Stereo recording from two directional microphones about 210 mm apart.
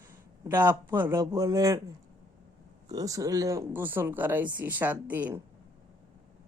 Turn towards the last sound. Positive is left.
turn(degrees=-10)  # may be behind; listen again after turning